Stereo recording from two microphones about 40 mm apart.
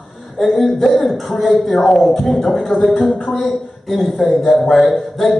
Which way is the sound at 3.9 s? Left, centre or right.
Centre.